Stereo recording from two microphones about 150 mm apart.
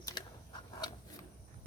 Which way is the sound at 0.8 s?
25° left (ahead or behind).